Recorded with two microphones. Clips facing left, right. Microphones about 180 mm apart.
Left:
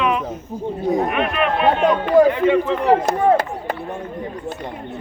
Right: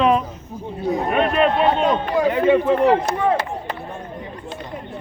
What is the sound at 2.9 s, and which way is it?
Speech, 45° left (ahead or behind).